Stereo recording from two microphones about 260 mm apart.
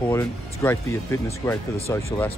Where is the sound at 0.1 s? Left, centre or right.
Centre.